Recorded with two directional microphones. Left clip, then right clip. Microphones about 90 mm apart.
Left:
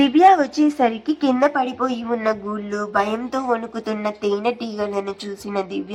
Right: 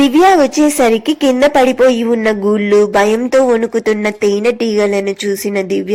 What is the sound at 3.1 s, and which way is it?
Speech, 20° right (ahead or behind).